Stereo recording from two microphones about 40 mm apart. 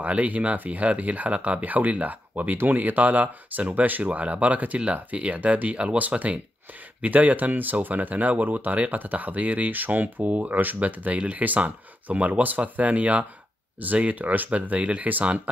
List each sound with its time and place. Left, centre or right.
0.0 s speech: right